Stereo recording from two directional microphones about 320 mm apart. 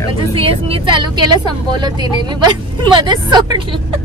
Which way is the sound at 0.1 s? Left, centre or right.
Centre.